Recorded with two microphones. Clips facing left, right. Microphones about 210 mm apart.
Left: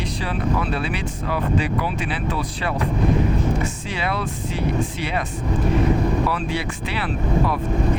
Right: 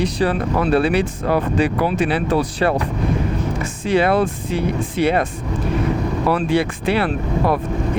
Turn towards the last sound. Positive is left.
turn(degrees=-55)  # may be behind; listen again after turning